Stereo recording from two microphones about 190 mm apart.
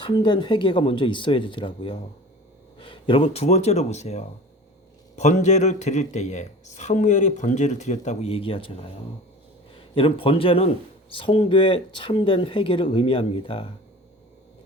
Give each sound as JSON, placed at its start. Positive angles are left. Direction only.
{"t": 0.0, "sound": "speech", "side_deg": 25}
{"t": 9.9, "sound": "speech", "side_deg": 30}